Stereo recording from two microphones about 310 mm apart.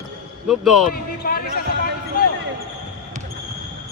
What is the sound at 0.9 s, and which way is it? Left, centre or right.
Speech, left.